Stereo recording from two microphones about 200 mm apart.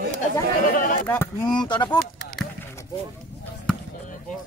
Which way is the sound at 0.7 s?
45° left (ahead or behind).